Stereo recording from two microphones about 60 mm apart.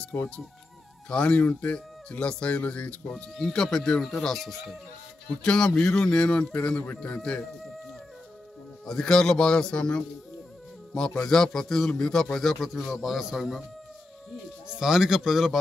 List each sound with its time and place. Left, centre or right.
1.0 s speech: centre
3.1 s speech: centre
5.4 s speech: centre
8.8 s a man's voice: centre
14.8 s speech: centre